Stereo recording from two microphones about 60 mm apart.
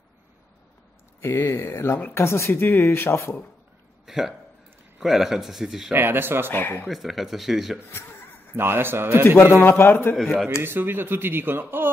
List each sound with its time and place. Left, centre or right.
1.2 s speech: left
4.0 s a sound: centre
5.0 s speech: centre
5.9 s speech: right
6.5 s a man's voice: left
6.9 s speech: centre
7.9 s chuckle: left
8.5 s speech: right
9.6 s a man's voice: left
10.1 s speech: centre
10.6 s speech: right